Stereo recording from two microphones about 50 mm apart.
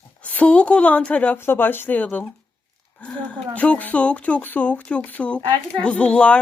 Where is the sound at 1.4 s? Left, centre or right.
Left.